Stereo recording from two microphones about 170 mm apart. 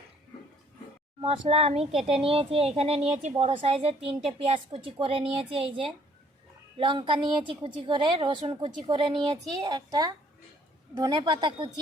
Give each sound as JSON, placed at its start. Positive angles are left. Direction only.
{"t": 1.2, "sound": "a woman's voice", "side_deg": -35}